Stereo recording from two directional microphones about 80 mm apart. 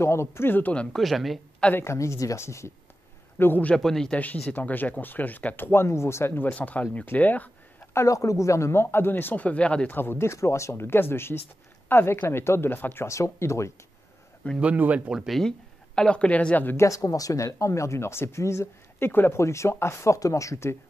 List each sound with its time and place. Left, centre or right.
0.0 s speech: left
0.9 s speech: centre
1.7 s speech: left
2.0 s a man's voice: left
3.6 s a woman's voice: centre
4.5 s speech: left
5.7 s speech: left
7.9 s speech: left; by 9.9 s centre
9.9 s speech: left
14.6 s speech: centre
15.0 s a woman's voice: centre
16.7 s speech: left